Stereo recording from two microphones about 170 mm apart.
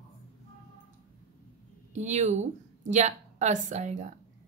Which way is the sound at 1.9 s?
45° right (ahead or behind).